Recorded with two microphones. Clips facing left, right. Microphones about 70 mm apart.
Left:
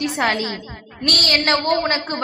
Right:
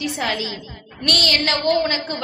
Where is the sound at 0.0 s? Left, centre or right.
Left.